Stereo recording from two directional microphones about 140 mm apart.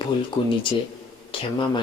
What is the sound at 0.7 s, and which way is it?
Speech, 35° left (ahead or behind).